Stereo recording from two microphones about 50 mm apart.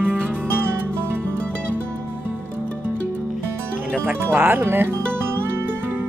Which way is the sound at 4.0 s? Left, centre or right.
Right.